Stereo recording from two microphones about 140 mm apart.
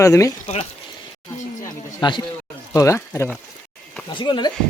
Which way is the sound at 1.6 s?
35° left (ahead or behind).